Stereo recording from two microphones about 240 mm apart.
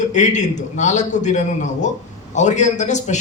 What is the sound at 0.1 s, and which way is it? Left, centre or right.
A man's voice, left.